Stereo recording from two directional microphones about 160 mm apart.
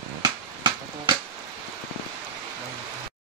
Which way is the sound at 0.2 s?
25° right (ahead or behind).